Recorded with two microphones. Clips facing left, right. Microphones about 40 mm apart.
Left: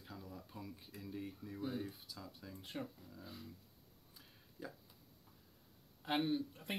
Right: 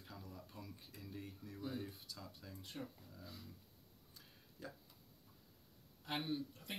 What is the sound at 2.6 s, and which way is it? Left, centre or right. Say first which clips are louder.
Speech: left 4 dB; left.